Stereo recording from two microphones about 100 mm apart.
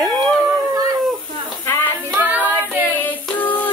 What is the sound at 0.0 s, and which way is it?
Howl, centre (ahead or behind).